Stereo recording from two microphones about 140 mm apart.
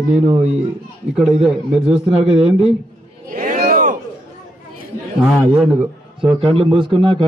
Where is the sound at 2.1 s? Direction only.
45° right (ahead or behind).